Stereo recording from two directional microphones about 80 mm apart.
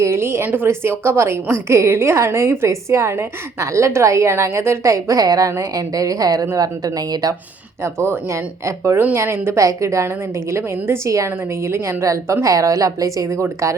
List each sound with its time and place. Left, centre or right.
0.0 s a woman's voice: right
7.8 s a woman's voice: right
9.6 s a woman's voice: right